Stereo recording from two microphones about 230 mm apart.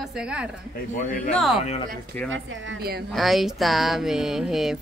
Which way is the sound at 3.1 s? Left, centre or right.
Centre.